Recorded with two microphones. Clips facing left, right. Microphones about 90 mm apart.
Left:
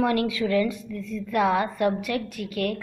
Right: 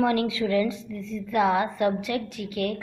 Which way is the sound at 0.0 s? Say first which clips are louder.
Even; 25° right (ahead or behind).